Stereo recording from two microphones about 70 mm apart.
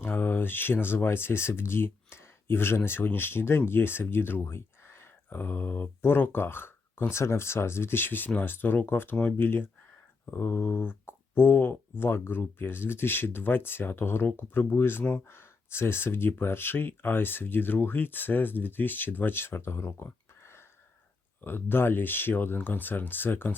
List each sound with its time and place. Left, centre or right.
0.0 s speech: left